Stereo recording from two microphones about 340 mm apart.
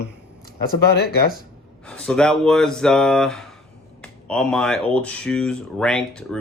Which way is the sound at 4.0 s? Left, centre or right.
Centre.